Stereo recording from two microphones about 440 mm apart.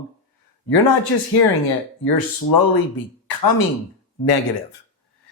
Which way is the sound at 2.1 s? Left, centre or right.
Left.